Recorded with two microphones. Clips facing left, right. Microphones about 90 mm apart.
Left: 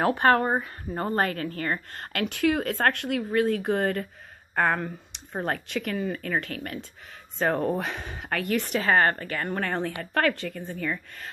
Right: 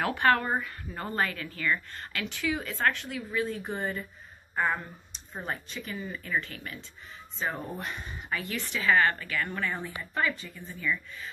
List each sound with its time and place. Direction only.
0.0 s a woman's voice: 35° left (ahead or behind); by 6.9 s 55° left (ahead or behind)
7.3 s a woman's voice: 65° left (ahead or behind)